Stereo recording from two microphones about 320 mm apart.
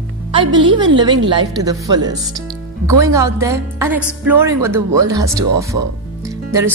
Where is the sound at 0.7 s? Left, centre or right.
Centre.